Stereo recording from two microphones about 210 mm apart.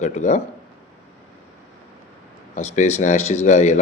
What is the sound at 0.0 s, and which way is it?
Speech, 35° left (ahead or behind).